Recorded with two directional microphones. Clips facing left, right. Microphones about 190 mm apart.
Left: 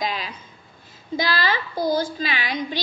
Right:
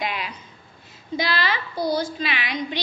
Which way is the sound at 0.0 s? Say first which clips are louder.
Left 1 dB; 35° left (ahead or behind).